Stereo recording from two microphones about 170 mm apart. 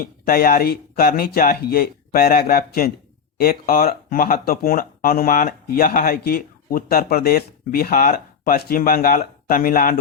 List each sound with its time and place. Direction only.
0.0 s speech: 60° left (ahead or behind)